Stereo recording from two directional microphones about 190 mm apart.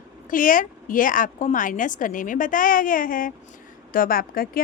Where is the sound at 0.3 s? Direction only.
45° left (ahead or behind).